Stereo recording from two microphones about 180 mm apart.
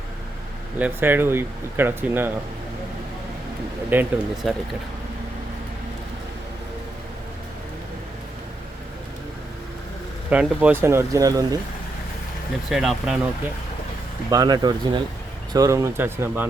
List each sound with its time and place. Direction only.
0.8 s speech: 10° right (ahead or behind)
3.9 s speech: 10° right (ahead or behind)
4.4 s speech: centre (ahead or behind)
10.2 s speech: 10° right (ahead or behind)
12.7 s speech: centre (ahead or behind)
14.3 s speech: 20° right (ahead or behind)